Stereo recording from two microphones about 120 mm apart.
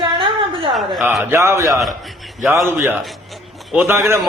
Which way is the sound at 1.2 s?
20° right (ahead or behind).